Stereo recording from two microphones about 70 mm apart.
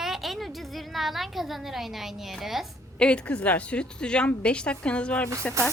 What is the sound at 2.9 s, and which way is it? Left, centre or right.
A woman's voice, centre.